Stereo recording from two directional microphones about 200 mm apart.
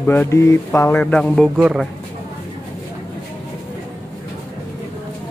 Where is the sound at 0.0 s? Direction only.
10° left (ahead or behind).